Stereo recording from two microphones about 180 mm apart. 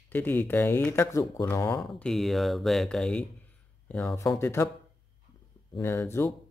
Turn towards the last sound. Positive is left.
turn(degrees=15)  # may be behind; listen again after turning